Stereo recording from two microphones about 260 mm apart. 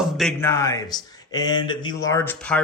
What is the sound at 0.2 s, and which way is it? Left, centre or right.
Speech, centre.